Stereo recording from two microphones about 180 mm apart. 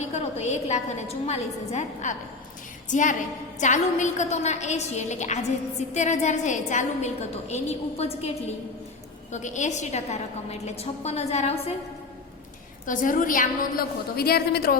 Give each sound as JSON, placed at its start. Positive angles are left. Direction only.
{"t": 0.0, "sound": "a woman's voice", "side_deg": 35}
{"t": 9.3, "sound": "a woman's voice", "side_deg": 40}
{"t": 12.8, "sound": "a woman's voice", "side_deg": 45}